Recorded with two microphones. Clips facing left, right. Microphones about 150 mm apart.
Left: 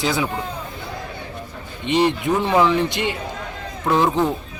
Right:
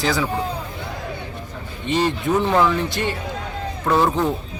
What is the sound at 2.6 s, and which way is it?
A man's voice, 15° left (ahead or behind).